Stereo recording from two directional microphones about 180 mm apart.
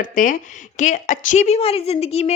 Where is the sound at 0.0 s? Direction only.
45° left (ahead or behind).